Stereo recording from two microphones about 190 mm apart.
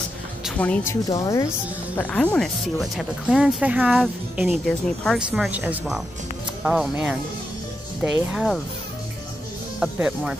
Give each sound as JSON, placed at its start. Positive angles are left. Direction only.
{"t": 0.6, "sound": "speech", "side_deg": 10}
{"t": 1.0, "sound": "speech", "side_deg": 20}
{"t": 2.0, "sound": "speech", "side_deg": 10}
{"t": 9.8, "sound": "speech", "side_deg": -5}